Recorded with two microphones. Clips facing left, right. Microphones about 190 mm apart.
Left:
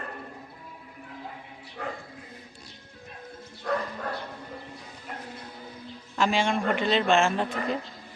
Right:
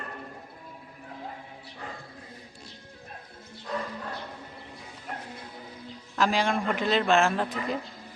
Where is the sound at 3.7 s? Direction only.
80° left.